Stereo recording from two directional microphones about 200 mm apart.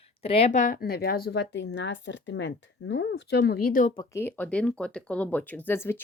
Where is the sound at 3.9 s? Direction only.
15° left (ahead or behind).